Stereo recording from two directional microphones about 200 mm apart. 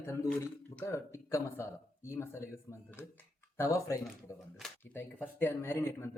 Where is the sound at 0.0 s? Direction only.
15° left (ahead or behind).